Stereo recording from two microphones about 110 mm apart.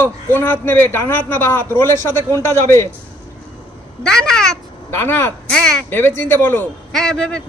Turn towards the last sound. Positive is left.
turn(degrees=10)  # may be behind; listen again after turning